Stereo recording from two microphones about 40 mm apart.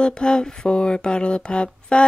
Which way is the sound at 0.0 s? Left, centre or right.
Left.